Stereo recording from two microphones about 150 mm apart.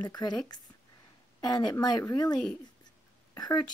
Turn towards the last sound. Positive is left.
turn(degrees=30)  # may be behind; listen again after turning